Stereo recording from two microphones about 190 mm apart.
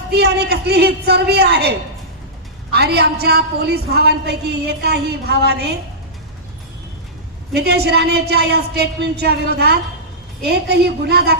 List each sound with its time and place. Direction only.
0.1 s a woman's voice: 60° right (ahead or behind)
2.7 s a woman's voice: 60° right (ahead or behind)
7.5 s a woman's voice: 60° right (ahead or behind)